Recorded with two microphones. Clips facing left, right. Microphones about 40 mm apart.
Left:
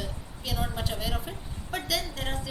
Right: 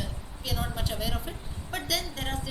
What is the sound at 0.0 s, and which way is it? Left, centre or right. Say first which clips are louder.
Speech: even; centre.